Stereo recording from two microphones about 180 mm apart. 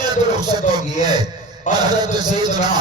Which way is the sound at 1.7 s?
25° right (ahead or behind).